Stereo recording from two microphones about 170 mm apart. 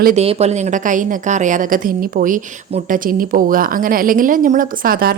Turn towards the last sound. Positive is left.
turn(degrees=-60)  # may be behind; listen again after turning